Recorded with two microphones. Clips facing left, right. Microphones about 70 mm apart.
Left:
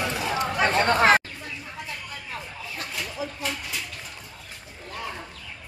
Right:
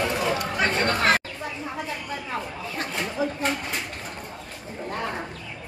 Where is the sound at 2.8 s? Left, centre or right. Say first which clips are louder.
Right 6 dB; right.